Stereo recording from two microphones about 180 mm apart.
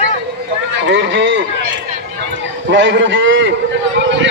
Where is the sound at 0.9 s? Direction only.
90° right.